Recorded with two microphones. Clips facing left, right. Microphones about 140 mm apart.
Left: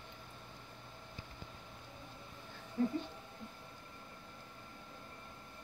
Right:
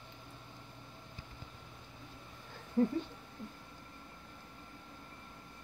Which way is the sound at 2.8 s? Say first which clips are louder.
Right 4 dB; 60° right (ahead or behind).